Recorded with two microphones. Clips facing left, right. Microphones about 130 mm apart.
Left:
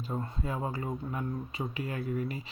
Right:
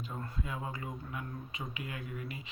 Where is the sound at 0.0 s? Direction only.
30° left (ahead or behind).